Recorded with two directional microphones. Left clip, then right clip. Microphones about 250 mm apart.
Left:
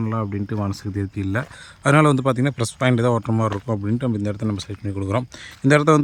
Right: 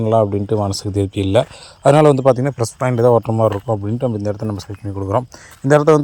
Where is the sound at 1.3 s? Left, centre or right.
Centre.